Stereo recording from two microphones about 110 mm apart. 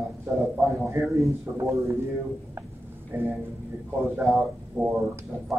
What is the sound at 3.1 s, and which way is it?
Speech, 20° right (ahead or behind).